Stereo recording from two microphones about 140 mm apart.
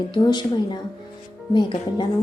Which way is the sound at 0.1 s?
30° left (ahead or behind).